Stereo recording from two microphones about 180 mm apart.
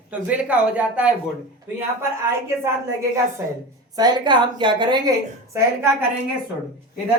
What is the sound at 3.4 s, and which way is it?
A woman's voice, 15° right (ahead or behind).